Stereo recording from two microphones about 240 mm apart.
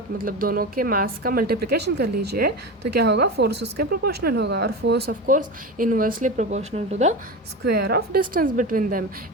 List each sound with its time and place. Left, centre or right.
0.2 s speech: right
7.6 s speech: right